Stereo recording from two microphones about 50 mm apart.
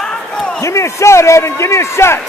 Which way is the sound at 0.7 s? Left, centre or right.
Left.